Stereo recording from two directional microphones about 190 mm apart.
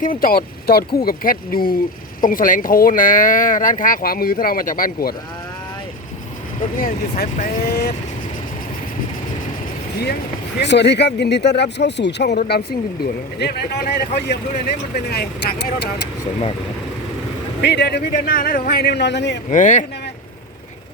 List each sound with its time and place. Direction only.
0.0 s speech: 45° left (ahead or behind)
6.7 s speech: 45° left (ahead or behind)
10.6 s speech: 65° left (ahead or behind)
17.6 s speech: 65° left (ahead or behind)
19.5 s speech: 40° left (ahead or behind)